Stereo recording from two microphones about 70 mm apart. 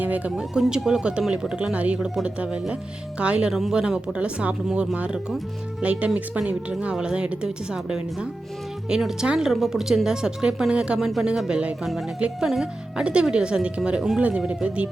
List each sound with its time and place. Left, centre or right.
0.3 s speech: centre